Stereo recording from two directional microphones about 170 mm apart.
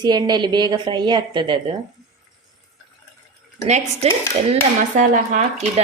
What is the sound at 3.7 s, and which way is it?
A woman's voice, 40° right (ahead or behind).